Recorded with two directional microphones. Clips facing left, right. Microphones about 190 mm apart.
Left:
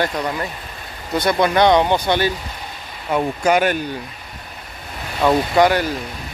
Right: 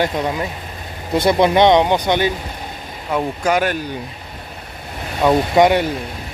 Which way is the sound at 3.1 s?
Centre (ahead or behind).